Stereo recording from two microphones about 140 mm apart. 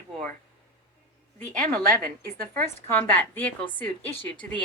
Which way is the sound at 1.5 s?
70° right (ahead or behind).